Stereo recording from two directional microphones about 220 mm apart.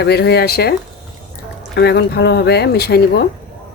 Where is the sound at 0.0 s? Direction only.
50° left (ahead or behind).